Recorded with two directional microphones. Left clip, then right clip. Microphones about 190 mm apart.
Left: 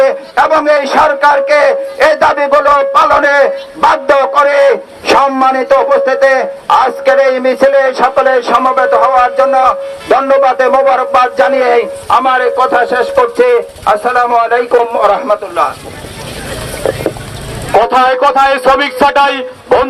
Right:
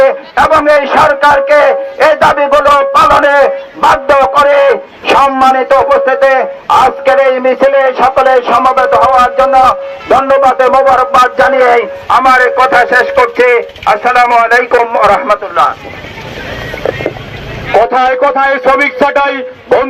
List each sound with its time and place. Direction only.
0.0 s speech: 30° right (ahead or behind)
16.8 s boat: 30° right (ahead or behind)
17.7 s a man's voice: 30° right (ahead or behind)